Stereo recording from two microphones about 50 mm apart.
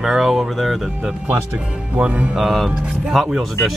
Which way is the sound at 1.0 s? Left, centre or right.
Right.